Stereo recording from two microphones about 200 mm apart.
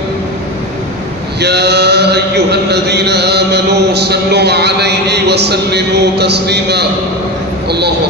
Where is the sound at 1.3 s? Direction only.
55° right (ahead or behind).